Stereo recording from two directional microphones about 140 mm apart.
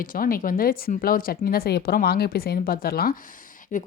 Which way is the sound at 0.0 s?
85° left.